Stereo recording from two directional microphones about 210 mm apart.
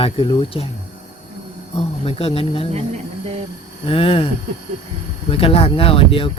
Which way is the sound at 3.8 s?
25° left (ahead or behind).